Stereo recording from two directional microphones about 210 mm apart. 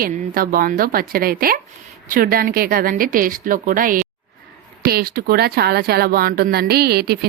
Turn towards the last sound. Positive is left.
turn(degrees=-50)  # may be behind; listen again after turning